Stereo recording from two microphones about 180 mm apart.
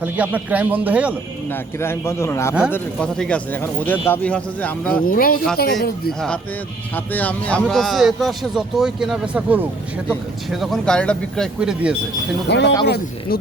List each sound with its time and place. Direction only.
0.0 s a man's voice: 10° right (ahead or behind)
1.8 s speech: 15° left (ahead or behind)
5.0 s speech: 55° left (ahead or behind)
6.1 s speech: 5° left (ahead or behind)
12.5 s speech: 70° left (ahead or behind)
12.8 s speech: 60° left (ahead or behind)